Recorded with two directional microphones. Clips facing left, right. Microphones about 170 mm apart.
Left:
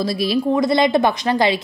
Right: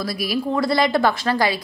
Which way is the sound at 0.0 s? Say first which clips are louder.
Left 5 dB; 25° left (ahead or behind).